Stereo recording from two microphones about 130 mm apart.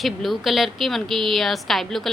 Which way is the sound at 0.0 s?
Centre (ahead or behind).